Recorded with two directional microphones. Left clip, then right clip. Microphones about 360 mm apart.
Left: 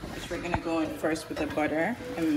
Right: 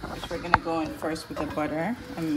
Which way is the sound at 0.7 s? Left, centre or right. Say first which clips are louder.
Even; right.